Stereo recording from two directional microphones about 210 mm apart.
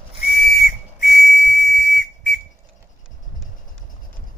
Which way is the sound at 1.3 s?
40° left (ahead or behind).